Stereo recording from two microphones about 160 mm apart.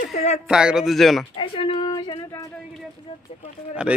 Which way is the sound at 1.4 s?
30° left (ahead or behind).